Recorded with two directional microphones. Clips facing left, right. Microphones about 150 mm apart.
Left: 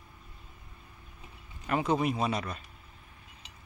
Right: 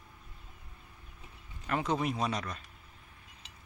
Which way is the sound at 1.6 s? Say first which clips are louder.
Left 3 dB; 10° left (ahead or behind).